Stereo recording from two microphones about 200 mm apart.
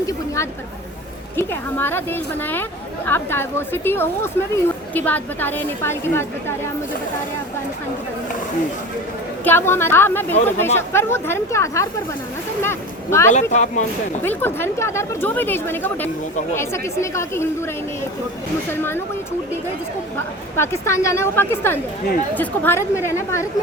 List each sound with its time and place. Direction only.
1.4 s speech: 10° left (ahead or behind)
9.4 s speech: 10° left (ahead or behind)
13.3 s speech: 35° left (ahead or behind)
14.2 s speech: 10° left (ahead or behind)
18.7 s speech: 10° left (ahead or behind)
20.6 s speech: 15° left (ahead or behind)